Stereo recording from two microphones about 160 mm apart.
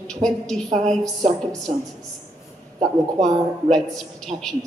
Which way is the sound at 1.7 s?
50° right (ahead or behind).